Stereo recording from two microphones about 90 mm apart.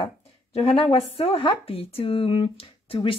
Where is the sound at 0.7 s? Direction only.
90° left.